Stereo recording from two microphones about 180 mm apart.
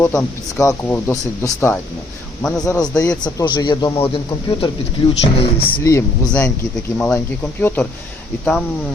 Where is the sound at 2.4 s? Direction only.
5° left (ahead or behind).